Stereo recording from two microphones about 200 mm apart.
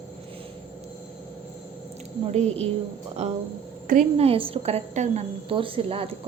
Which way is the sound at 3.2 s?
35° right (ahead or behind).